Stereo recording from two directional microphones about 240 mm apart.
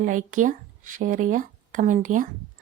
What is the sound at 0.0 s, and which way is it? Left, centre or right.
A woman's voice, right.